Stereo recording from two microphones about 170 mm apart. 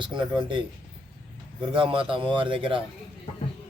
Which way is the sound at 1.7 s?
30° right (ahead or behind).